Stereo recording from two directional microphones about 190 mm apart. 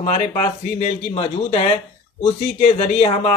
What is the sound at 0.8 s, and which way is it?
Speech, 30° left (ahead or behind).